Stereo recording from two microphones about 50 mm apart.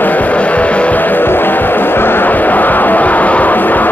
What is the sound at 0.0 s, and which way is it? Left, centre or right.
Music, left.